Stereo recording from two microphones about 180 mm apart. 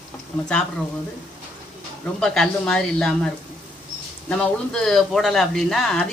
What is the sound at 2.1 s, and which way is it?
Speech, 5° left (ahead or behind).